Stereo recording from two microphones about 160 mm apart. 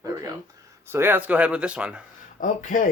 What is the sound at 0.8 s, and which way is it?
Speech, 15° right (ahead or behind).